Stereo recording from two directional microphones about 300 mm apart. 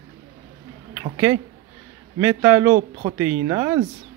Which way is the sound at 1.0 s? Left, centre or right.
Centre.